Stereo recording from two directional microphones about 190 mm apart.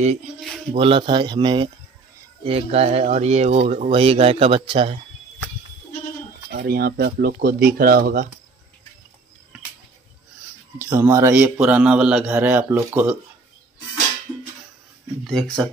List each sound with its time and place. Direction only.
0.7 s a man's voice: 30° right (ahead or behind)
6.5 s speech: 55° right (ahead or behind)
10.8 s a man's voice: 15° right (ahead or behind)
15.2 s speech: centre (ahead or behind)